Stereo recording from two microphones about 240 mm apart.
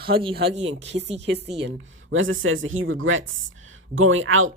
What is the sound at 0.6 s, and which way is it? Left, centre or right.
Speech, right.